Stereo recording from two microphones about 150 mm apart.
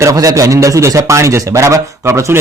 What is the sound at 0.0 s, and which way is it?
A man's voice, 25° right (ahead or behind).